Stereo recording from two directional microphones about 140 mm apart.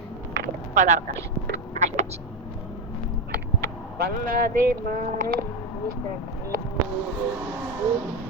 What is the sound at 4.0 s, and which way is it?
Speech, 85° right.